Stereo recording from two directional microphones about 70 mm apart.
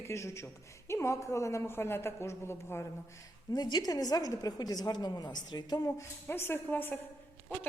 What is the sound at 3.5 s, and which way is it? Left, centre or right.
A woman's voice, left.